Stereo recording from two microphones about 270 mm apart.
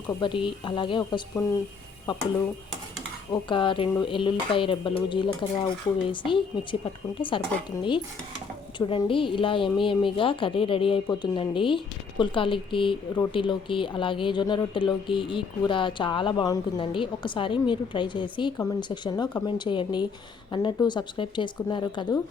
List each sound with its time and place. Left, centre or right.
0.1 s a woman's voice: centre
3.3 s a woman's voice: centre
8.8 s a woman's voice: centre